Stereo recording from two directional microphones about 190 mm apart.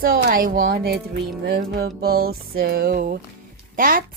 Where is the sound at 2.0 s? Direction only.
55° right (ahead or behind).